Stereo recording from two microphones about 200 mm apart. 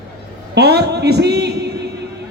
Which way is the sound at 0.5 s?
55° right (ahead or behind).